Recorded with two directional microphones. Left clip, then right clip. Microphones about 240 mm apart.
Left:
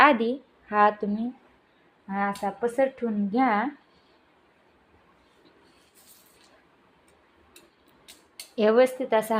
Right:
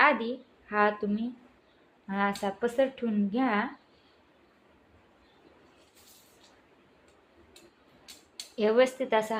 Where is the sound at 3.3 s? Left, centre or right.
Left.